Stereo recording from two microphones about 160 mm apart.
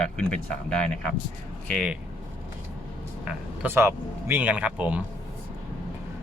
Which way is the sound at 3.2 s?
10° right (ahead or behind).